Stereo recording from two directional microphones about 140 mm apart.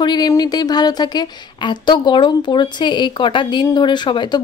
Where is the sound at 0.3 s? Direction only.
30° left (ahead or behind).